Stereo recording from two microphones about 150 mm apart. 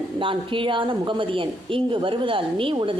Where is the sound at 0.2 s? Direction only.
35° right (ahead or behind).